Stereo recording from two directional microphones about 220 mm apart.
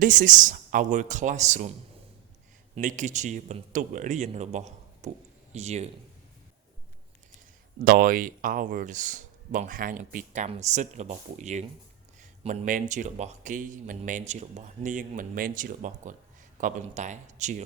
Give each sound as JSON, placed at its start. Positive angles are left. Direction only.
{"t": 0.0, "sound": "speech", "side_deg": -35}
{"t": 2.7, "sound": "speech", "side_deg": -35}
{"t": 7.9, "sound": "speech", "side_deg": -40}